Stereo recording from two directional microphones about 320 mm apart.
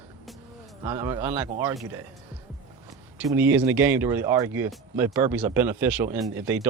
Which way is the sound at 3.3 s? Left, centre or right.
Centre.